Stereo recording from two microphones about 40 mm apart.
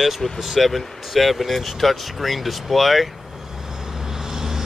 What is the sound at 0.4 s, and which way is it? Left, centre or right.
Speech, centre.